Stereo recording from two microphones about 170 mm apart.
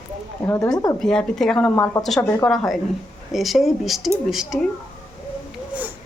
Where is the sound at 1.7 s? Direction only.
20° left (ahead or behind).